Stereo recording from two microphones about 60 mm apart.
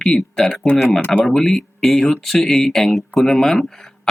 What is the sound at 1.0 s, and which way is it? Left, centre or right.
Speech, left.